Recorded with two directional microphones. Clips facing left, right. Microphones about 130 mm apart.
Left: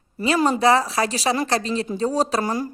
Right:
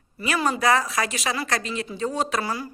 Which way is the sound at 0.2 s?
35° left (ahead or behind).